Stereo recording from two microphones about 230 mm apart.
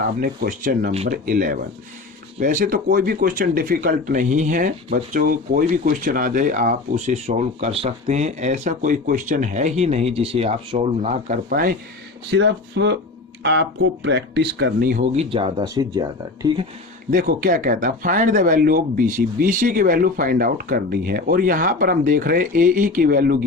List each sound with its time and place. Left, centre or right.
0.2 s speech: right
12.3 s speech: right; by 16.6 s centre
17.1 s speech: right